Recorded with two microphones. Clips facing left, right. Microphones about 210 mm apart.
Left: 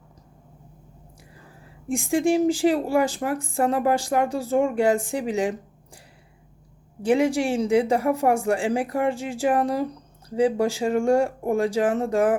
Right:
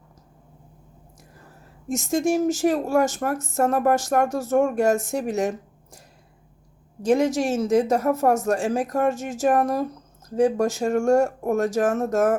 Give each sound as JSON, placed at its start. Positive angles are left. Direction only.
{"t": 1.9, "sound": "a woman's voice", "side_deg": 10}
{"t": 7.1, "sound": "a woman's voice", "side_deg": 10}